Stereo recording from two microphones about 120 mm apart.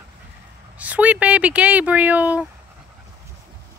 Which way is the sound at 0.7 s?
10° right (ahead or behind).